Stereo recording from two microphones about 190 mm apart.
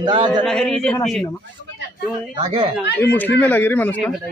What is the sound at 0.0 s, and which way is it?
Speech, 25° right (ahead or behind).